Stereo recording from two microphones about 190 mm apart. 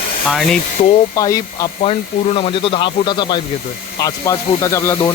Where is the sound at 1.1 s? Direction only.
20° left (ahead or behind).